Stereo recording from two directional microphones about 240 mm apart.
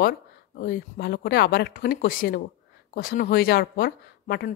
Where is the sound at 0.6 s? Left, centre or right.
Left.